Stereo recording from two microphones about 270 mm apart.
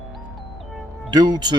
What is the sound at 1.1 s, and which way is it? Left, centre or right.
Speech, centre.